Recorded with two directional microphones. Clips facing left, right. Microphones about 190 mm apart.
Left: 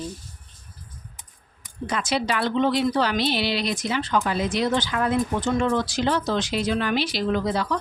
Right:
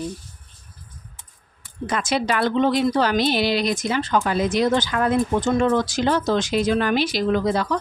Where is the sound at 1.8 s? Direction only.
50° right (ahead or behind).